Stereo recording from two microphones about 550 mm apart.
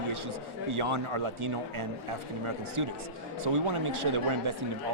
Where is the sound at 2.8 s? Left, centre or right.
Right.